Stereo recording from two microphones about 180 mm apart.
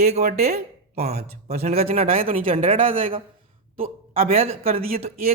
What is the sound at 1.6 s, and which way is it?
Speech, 35° right (ahead or behind).